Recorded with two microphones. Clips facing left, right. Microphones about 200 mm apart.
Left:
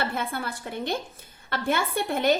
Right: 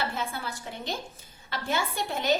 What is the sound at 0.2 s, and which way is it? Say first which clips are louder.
A woman's voice: left 3 dB; 55° left (ahead or behind).